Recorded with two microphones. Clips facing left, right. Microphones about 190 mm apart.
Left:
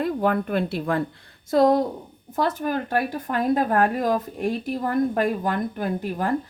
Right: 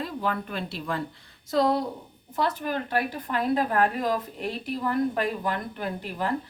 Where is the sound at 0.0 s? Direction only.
50° left (ahead or behind).